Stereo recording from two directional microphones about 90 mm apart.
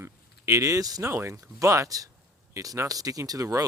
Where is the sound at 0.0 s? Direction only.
30° right (ahead or behind).